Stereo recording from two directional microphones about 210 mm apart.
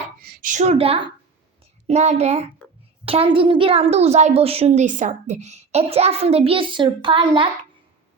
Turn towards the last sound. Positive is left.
turn(degrees=-25)  # may be behind; listen again after turning